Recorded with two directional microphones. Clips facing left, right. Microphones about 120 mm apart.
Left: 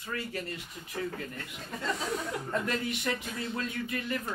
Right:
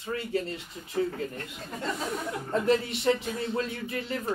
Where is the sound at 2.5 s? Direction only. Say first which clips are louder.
Right 8 dB; 30° right (ahead or behind).